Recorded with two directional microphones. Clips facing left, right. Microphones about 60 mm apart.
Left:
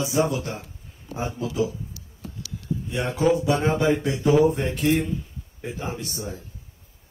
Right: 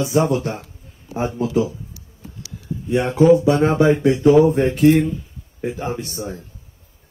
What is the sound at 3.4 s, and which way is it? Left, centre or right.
Speech, right.